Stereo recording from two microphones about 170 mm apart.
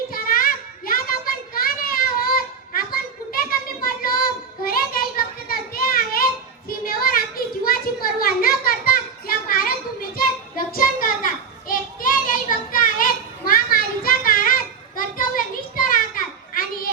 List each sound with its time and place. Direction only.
0.1 s a sound: 60° left (ahead or behind)
10.2 s child singing: 60° left (ahead or behind)
11.7 s children playing: 55° left (ahead or behind)